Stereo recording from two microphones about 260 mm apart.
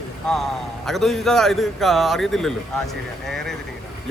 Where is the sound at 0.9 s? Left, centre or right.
Centre.